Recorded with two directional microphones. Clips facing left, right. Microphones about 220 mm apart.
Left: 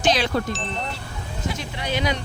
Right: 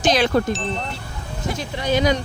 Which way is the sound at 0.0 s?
45° right (ahead or behind).